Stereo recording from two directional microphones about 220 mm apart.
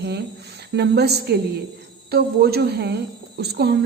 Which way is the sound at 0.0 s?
50° right (ahead or behind).